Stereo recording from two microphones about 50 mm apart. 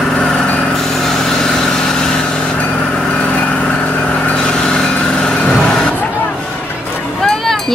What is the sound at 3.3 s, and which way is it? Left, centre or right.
Vehicle, left.